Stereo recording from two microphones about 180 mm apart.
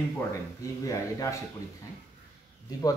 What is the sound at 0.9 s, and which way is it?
Speech, 20° left (ahead or behind).